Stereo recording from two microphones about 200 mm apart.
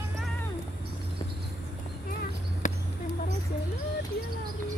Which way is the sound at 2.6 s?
40° left (ahead or behind).